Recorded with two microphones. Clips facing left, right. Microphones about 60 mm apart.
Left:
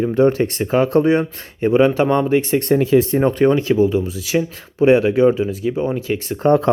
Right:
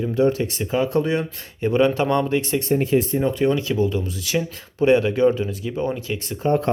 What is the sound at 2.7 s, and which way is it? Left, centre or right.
Speech, left.